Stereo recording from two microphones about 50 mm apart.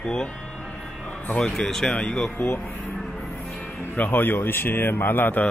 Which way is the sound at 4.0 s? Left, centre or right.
Left.